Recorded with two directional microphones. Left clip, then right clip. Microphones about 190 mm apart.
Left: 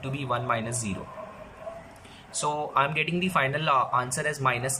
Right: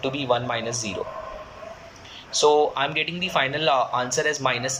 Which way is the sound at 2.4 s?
20° right (ahead or behind).